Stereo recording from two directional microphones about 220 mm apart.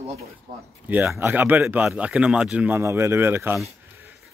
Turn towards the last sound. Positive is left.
turn(degrees=-10)  # may be behind; listen again after turning